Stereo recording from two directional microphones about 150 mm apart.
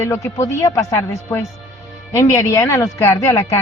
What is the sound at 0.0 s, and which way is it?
Speech, 20° left (ahead or behind).